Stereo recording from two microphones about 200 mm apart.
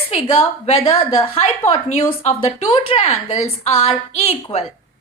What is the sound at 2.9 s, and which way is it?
Speech, 30° left (ahead or behind).